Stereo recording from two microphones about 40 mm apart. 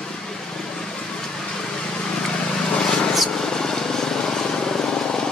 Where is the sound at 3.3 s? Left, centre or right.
Centre.